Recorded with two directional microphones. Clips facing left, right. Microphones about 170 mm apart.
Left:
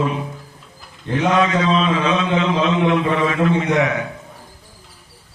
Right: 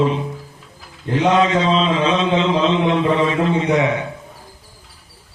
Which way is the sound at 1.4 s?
25° right (ahead or behind).